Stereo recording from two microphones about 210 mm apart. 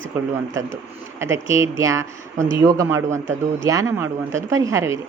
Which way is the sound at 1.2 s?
15° right (ahead or behind).